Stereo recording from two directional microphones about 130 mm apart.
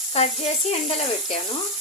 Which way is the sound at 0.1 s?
55° left (ahead or behind).